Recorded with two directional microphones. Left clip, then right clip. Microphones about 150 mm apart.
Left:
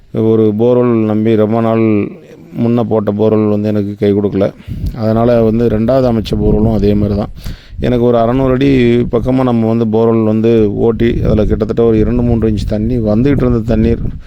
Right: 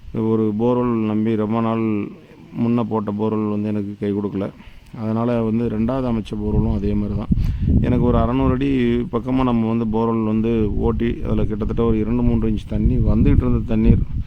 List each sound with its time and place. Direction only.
0.2 s speech: 50° left (ahead or behind)
8.3 s a man's voice: 35° left (ahead or behind)
8.5 s speech: 50° left (ahead or behind)
9.3 s a man's voice: 35° left (ahead or behind)
9.8 s speech: 50° left (ahead or behind)
12.1 s a man's voice: 30° left (ahead or behind)
12.4 s speech: 45° left (ahead or behind)